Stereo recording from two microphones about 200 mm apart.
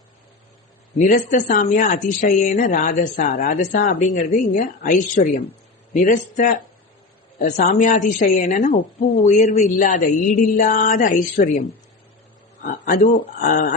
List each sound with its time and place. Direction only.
0.9 s a woman's voice: 40° left (ahead or behind)
12.6 s speech: 40° left (ahead or behind)